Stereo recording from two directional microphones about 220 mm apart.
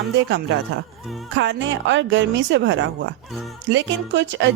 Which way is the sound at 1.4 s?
55° right (ahead or behind).